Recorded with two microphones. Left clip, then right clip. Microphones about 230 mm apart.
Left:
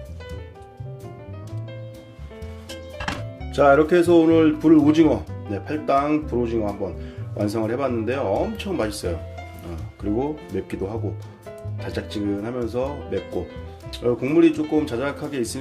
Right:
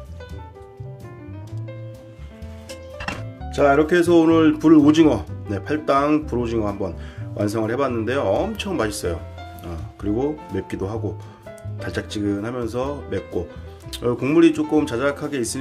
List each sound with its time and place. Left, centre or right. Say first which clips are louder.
3.5 s speech: left 1 dB; centre; by 6.9 s right
7.3 s speech: right 2 dB; centre
10.5 s speech: right 1 dB; centre